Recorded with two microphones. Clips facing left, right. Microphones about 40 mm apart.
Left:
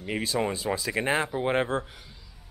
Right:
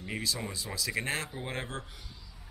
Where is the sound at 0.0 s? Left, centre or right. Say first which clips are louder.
Left 8 dB; left.